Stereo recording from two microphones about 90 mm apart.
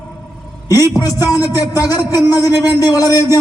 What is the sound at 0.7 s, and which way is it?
A man's voice, 40° left (ahead or behind).